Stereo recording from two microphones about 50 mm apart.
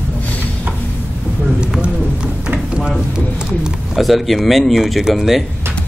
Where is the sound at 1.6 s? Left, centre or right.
Centre.